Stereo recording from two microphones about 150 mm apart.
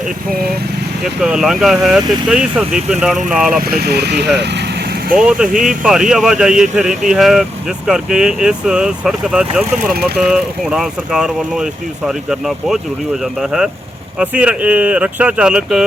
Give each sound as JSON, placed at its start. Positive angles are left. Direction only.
{"t": 1.0, "sound": "speech", "side_deg": -5}
{"t": 3.6, "sound": "speech", "side_deg": -90}
{"t": 4.4, "sound": "vehicle", "side_deg": -90}
{"t": 5.1, "sound": "speech", "side_deg": -5}